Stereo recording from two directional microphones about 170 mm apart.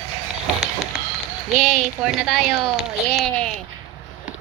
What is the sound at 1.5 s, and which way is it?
Speech, centre (ahead or behind).